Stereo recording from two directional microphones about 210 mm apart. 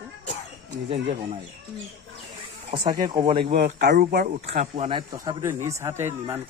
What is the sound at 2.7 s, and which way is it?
Speech, 20° right (ahead or behind).